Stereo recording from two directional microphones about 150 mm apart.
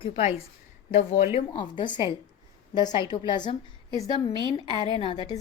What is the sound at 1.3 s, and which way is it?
A woman's voice, 35° left (ahead or behind).